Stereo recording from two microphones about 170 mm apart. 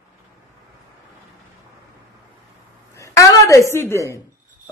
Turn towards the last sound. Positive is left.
turn(degrees=15)  # may be behind; listen again after turning